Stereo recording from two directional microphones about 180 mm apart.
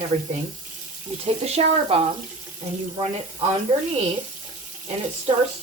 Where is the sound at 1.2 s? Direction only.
35° right (ahead or behind).